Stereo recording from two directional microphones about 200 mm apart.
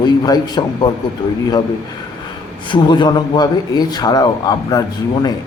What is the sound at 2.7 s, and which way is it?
A man's voice, 25° left (ahead or behind).